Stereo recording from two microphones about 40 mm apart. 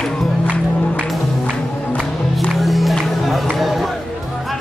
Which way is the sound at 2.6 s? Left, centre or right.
Centre.